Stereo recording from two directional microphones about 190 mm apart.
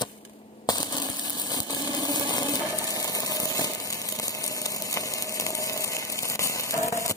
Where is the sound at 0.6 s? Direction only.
20° left (ahead or behind).